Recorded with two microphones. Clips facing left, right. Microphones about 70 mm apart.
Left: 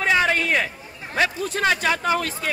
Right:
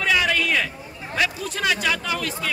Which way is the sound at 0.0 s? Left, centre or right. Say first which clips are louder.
Left 1 dB; left.